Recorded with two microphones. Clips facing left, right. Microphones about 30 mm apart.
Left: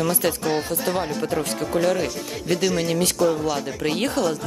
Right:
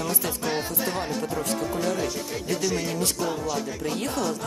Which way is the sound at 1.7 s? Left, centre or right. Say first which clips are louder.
Left 5 dB; left.